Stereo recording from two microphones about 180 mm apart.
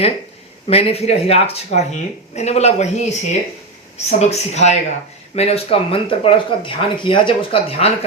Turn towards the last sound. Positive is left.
turn(degrees=35)  # may be behind; listen again after turning